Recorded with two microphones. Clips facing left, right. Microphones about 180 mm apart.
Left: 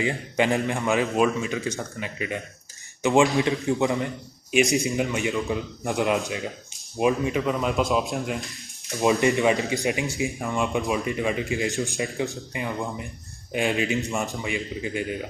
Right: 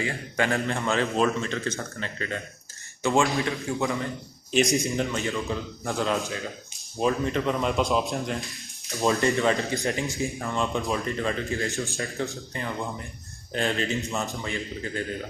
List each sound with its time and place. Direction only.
0.0 s speech: 20° left (ahead or behind)
4.5 s speech: centre (ahead or behind)
4.9 s speech: 15° left (ahead or behind)
8.9 s speech: 15° left (ahead or behind)